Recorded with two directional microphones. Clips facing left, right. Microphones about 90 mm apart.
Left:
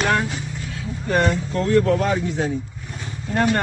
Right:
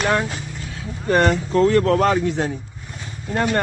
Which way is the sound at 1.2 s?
80° right.